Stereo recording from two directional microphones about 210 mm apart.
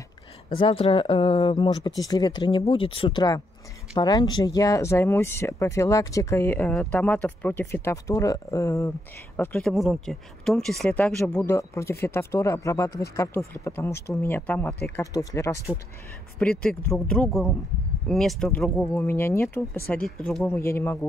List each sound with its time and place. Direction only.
0.6 s speech: 25° left (ahead or behind)